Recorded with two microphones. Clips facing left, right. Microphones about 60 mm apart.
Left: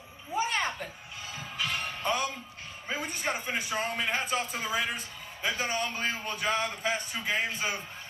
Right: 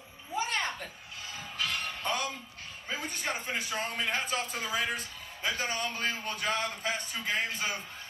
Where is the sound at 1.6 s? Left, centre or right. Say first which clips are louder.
Left 1 dB; left.